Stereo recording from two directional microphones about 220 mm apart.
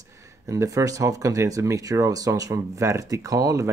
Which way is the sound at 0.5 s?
15° right (ahead or behind).